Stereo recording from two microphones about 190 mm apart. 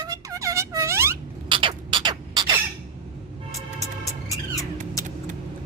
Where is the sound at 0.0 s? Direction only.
20° right (ahead or behind).